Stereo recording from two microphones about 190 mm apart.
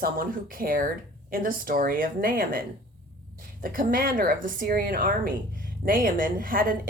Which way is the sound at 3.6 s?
45° right (ahead or behind).